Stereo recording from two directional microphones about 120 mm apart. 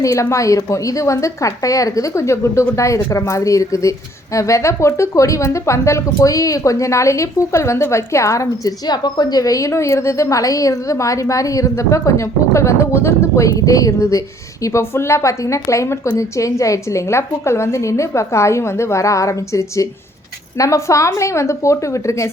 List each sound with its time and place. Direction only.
0.0 s speech: 25° left (ahead or behind)